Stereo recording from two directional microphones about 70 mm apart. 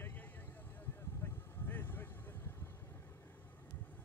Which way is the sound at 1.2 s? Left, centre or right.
Left.